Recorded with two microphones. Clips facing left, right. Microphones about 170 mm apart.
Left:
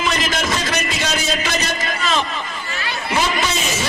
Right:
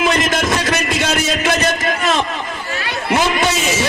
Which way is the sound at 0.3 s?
50° right (ahead or behind).